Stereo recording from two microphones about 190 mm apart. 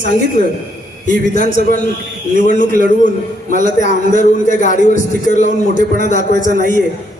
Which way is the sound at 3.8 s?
40° left (ahead or behind).